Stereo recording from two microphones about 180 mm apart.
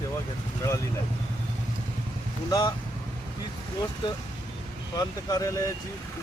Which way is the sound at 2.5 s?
20° left (ahead or behind).